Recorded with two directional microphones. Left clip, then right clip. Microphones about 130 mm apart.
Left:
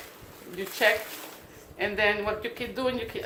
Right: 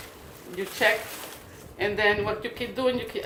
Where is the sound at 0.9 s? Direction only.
30° left (ahead or behind).